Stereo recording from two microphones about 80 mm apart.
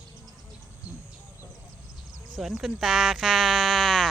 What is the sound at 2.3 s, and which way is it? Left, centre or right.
Speech, centre.